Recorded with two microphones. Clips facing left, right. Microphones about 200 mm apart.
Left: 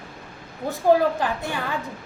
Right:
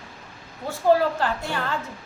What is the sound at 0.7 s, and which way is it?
A woman's voice, 15° left (ahead or behind).